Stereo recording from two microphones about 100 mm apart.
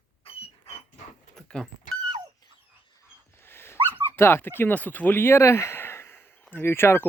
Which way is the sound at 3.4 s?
25° left (ahead or behind).